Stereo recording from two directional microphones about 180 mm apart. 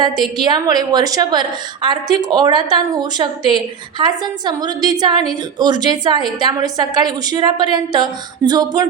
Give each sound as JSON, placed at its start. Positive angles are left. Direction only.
{"t": 0.3, "sound": "a woman's voice", "side_deg": -25}